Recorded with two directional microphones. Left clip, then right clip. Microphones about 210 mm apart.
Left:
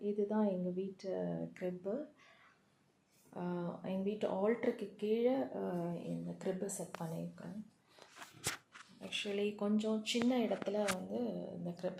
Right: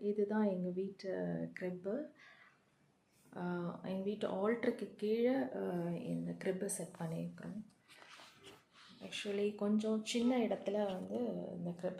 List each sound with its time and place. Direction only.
0.0 s speech: 5° right (ahead or behind)
3.3 s speech: centre (ahead or behind)
9.0 s speech: centre (ahead or behind)